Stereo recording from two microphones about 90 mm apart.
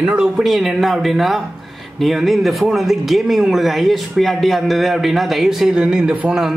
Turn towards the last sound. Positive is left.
turn(degrees=-15)  # may be behind; listen again after turning